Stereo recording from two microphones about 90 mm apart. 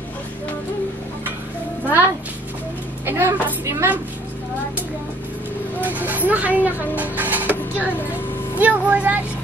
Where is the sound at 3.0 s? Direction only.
30° right (ahead or behind).